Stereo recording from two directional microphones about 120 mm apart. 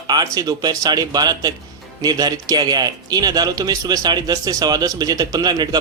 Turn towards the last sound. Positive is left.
turn(degrees=-35)  # may be behind; listen again after turning